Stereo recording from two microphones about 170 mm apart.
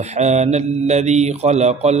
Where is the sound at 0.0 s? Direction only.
40° right (ahead or behind).